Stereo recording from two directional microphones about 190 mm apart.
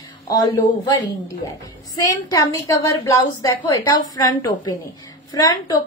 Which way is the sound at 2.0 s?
20° left (ahead or behind).